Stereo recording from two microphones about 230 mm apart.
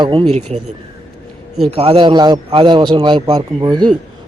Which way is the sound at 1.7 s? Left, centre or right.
Right.